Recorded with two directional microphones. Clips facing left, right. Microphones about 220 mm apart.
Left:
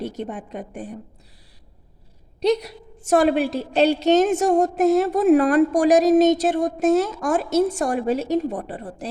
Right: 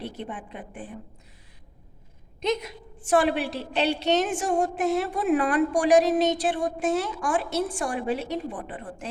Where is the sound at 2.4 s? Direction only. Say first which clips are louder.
Left 7 dB; 35° left (ahead or behind).